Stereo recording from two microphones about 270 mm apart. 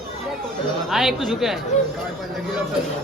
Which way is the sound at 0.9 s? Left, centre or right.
Centre.